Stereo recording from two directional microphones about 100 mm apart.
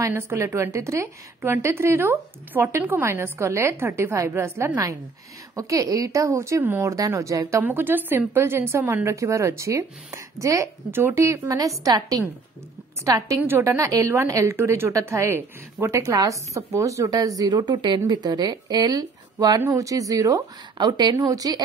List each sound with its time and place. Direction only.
0.0 s a woman's voice: 25° right (ahead or behind)